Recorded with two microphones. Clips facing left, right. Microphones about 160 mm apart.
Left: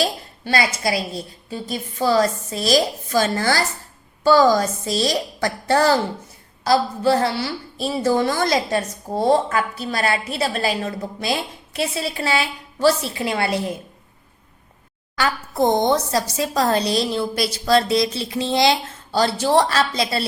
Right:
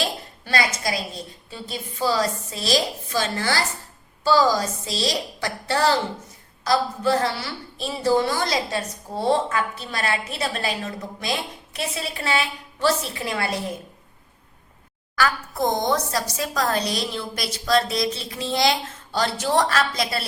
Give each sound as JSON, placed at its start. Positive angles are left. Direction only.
{"t": 0.0, "sound": "a woman's voice", "side_deg": 30}
{"t": 1.5, "sound": "a woman's voice", "side_deg": 45}
{"t": 4.2, "sound": "a woman's voice", "side_deg": 55}
{"t": 6.7, "sound": "a woman's voice", "side_deg": 30}
{"t": 8.0, "sound": "a woman's voice", "side_deg": 50}
{"t": 15.1, "sound": "a woman's voice", "side_deg": 25}